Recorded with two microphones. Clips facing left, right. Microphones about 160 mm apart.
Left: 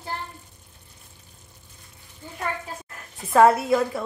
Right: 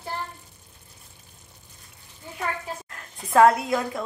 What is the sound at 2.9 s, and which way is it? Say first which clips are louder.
A woman's voice: left 4 dB; centre (ahead or behind).